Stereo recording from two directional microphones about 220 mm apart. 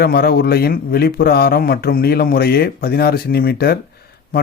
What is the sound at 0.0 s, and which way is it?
A man's voice, 45° left (ahead or behind).